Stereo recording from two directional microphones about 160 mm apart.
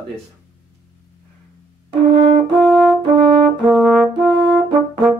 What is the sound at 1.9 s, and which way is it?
French horn, 30° right (ahead or behind).